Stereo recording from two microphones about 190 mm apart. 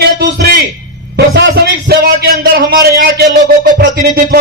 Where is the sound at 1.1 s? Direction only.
55° right (ahead or behind).